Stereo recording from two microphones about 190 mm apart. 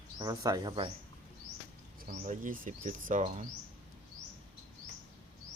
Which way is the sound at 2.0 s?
40° right (ahead or behind).